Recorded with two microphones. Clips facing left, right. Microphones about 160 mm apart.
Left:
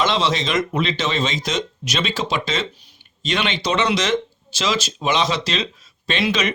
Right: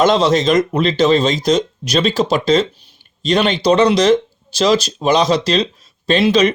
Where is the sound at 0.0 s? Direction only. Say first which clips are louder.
Right 8 dB; 45° right (ahead or behind).